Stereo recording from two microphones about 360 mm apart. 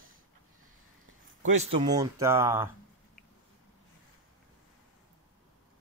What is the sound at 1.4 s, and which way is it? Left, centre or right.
Speech, centre.